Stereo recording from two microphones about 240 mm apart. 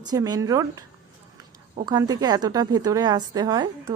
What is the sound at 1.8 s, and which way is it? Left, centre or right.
A woman's voice, centre.